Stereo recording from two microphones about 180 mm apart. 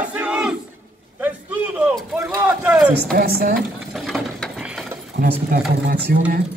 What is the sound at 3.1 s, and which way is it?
Speech, 55° right (ahead or behind).